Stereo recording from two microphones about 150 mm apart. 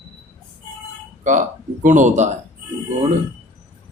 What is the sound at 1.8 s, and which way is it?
Speech, 55° right (ahead or behind).